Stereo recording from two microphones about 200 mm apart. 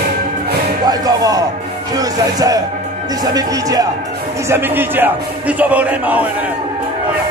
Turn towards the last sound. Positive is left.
turn(degrees=-5)  # may be behind; listen again after turning